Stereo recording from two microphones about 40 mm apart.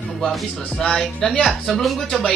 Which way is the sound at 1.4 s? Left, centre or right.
Centre.